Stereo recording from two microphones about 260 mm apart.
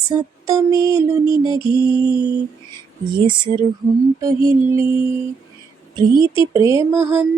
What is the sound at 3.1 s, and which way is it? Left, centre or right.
Music, centre.